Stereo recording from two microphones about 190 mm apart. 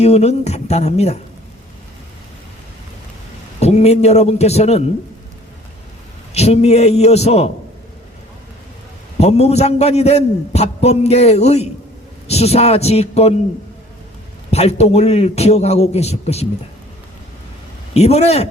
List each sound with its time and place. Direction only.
0.0 s a man's voice: 35° left (ahead or behind)
3.6 s a man's voice: 35° left (ahead or behind)
6.3 s a man's voice: 35° left (ahead or behind)
9.1 s a man's voice: 35° left (ahead or behind)
14.5 s a man's voice: 35° left (ahead or behind)
17.9 s a man's voice: 35° left (ahead or behind)